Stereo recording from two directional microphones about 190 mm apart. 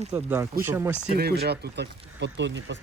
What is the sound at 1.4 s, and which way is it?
Speech, 60° right (ahead or behind).